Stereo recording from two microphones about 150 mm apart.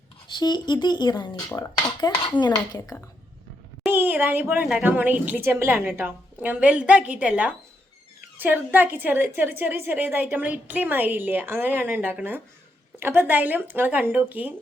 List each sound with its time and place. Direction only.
0.3 s speech: 30° left (ahead or behind)
3.8 s a woman's voice: 15° right (ahead or behind)